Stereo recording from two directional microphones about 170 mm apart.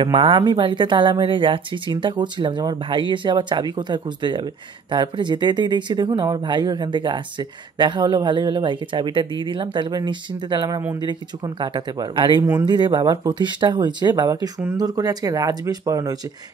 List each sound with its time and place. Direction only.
0.0 s speech: 30° right (ahead or behind)